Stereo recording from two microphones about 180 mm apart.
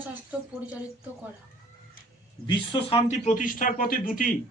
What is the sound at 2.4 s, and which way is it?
Speech, 30° left (ahead or behind).